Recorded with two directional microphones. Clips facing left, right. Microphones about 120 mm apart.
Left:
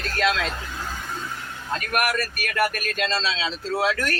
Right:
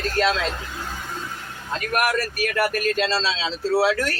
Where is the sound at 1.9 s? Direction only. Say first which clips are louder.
Right 3 dB; 25° right (ahead or behind).